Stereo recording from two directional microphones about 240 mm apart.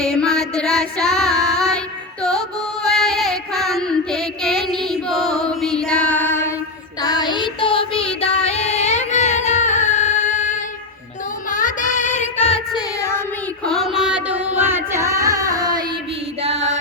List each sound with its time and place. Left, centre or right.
0.0 s child singing: centre
2.8 s music: centre
5.5 s a sound: centre
7.0 s music: centre
11.5 s child singing: left
13.0 s child singing: centre
13.7 s music: centre
16.4 s music: right